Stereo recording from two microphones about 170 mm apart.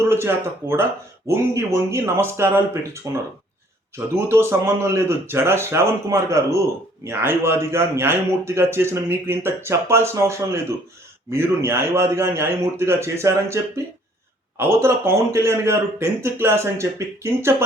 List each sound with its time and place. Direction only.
0.1 s a man's voice: 15° right (ahead or behind)
14.6 s a man's voice: 15° right (ahead or behind)